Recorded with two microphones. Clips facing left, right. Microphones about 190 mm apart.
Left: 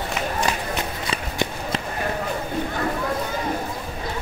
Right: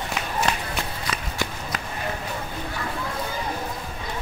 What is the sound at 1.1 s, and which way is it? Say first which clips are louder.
Walk: left 5 dB; 25° left (ahead or behind).